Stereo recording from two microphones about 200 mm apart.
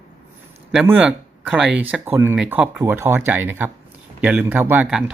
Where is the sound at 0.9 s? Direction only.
5° right (ahead or behind).